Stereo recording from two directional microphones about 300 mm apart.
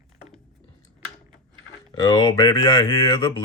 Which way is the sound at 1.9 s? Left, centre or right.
Centre.